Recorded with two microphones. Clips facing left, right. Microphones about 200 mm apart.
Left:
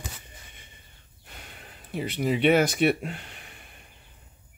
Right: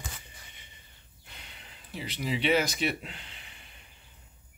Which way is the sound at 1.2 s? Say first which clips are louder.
Left 5 dB; 50° left (ahead or behind).